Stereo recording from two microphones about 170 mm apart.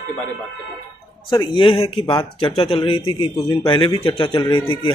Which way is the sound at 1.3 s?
30° left (ahead or behind).